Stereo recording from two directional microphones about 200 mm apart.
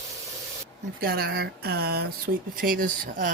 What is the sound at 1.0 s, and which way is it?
Speech, 50° right (ahead or behind).